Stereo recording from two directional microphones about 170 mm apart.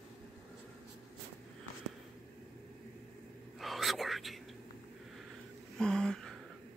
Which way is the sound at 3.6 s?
Centre (ahead or behind).